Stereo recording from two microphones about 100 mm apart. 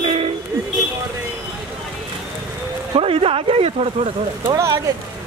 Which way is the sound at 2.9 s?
70° right (ahead or behind).